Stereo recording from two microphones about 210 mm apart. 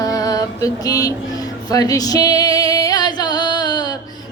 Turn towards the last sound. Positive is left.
turn(degrees=20)  # may be behind; listen again after turning